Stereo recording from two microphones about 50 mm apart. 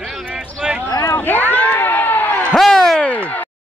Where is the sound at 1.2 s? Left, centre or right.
Left.